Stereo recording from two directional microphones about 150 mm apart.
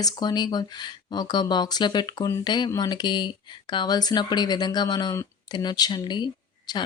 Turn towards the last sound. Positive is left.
turn(degrees=30)  # may be behind; listen again after turning